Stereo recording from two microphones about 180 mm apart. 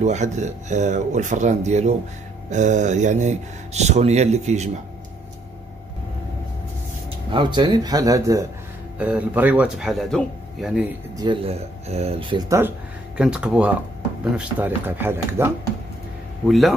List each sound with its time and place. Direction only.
0.0 s speech: 40° right (ahead or behind)
7.2 s speech: 25° right (ahead or behind)
8.9 s speech: 10° right (ahead or behind)
11.1 s speech: 25° right (ahead or behind)
12.4 s speech: 15° right (ahead or behind)
16.4 s speech: centre (ahead or behind)